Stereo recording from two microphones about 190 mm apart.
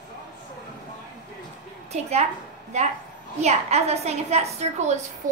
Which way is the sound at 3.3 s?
35° right (ahead or behind).